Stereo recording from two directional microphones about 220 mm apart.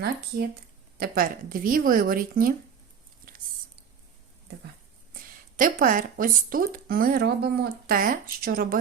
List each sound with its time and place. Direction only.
0.9 s speech: 45° right (ahead or behind)
5.5 s speech: 35° right (ahead or behind)